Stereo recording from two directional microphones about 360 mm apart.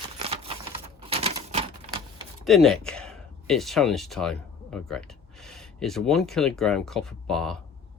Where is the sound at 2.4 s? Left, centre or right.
Centre.